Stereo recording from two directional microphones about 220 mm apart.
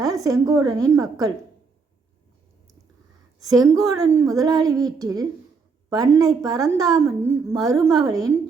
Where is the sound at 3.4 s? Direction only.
15° right (ahead or behind).